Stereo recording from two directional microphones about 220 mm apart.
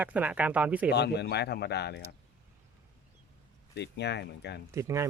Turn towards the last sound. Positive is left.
turn(degrees=-15)  # may be behind; listen again after turning